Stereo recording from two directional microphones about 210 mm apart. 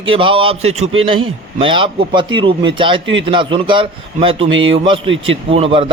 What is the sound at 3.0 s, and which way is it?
Speech, 60° right (ahead or behind).